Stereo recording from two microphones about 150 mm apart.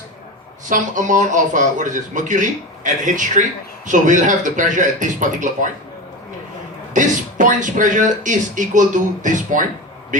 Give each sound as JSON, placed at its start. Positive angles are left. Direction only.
{"t": 0.7, "sound": "speech", "side_deg": -55}
{"t": 6.9, "sound": "speech", "side_deg": -60}